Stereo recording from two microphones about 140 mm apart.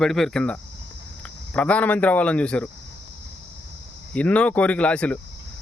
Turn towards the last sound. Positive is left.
turn(degrees=10)  # may be behind; listen again after turning